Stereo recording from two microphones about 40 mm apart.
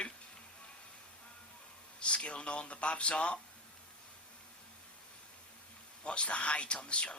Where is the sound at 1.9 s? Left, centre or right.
Left.